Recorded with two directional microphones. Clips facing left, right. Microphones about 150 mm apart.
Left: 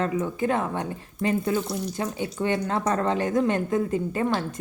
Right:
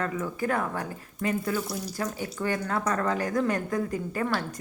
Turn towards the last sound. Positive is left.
turn(degrees=20)  # may be behind; listen again after turning